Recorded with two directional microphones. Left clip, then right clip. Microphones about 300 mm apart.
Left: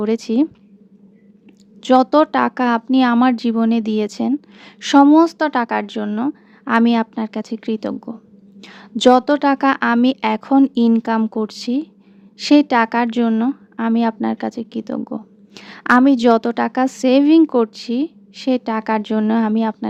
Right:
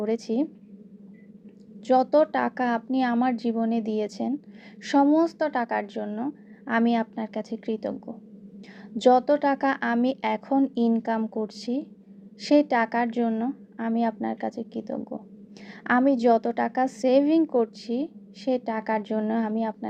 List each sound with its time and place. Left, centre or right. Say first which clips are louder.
0.0 s speech: left 8 dB; left
1.8 s speech: left 7 dB; left
14.9 s speech: left 9 dB; left
15.5 s speech: left 10 dB; left